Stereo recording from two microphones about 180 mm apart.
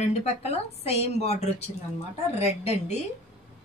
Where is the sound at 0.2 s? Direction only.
35° left (ahead or behind).